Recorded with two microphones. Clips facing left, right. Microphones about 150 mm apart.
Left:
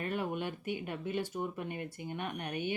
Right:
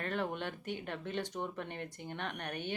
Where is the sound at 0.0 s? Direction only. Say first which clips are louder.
Left 1 dB; 10° left (ahead or behind).